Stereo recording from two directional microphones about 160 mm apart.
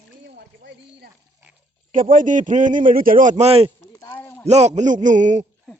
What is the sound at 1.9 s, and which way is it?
Speech, 55° right (ahead or behind).